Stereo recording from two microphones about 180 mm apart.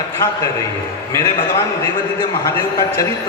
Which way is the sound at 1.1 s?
20° left (ahead or behind).